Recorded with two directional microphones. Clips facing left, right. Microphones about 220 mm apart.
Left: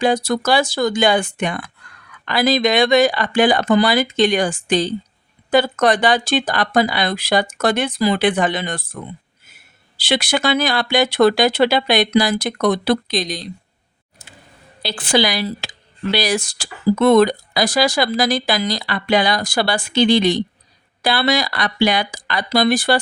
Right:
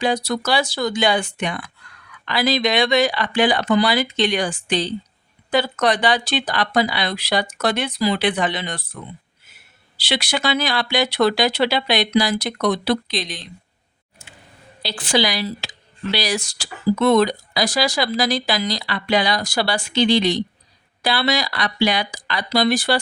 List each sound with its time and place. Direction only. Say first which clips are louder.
0.0 s speech: left 4 dB; 50° left (ahead or behind)
10.0 s speech: left 4 dB; 50° left (ahead or behind)
14.8 s speech: left 3 dB; 55° left (ahead or behind)